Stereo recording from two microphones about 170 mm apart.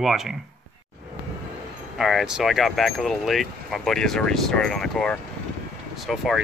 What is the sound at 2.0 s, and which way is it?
Speech, centre (ahead or behind).